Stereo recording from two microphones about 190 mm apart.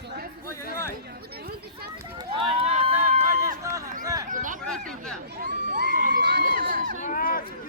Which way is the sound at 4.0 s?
20° right (ahead or behind).